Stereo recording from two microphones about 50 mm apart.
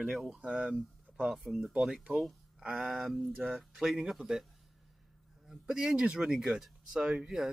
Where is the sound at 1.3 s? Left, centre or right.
Centre.